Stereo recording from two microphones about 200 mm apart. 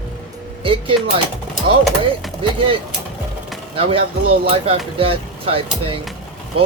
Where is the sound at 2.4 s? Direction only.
25° right (ahead or behind).